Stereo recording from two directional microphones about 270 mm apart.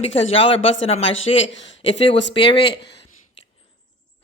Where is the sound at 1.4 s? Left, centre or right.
Left.